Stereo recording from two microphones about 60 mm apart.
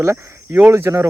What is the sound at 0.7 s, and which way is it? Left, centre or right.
Speech, right.